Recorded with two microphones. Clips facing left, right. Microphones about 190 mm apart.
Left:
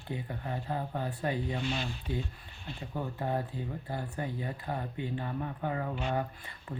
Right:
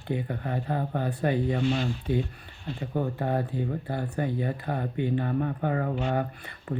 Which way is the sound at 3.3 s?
65° right (ahead or behind).